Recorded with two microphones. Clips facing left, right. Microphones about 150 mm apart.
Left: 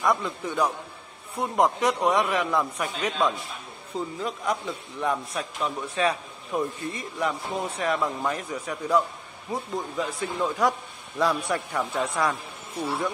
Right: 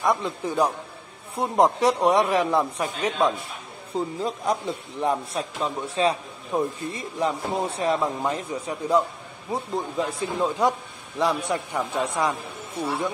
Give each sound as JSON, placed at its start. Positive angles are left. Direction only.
{"t": 0.0, "sound": "speech", "side_deg": -30}